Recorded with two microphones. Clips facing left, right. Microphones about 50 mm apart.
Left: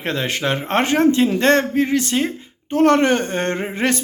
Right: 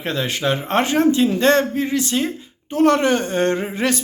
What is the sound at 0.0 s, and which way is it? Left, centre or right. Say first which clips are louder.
A man's voice: even; left.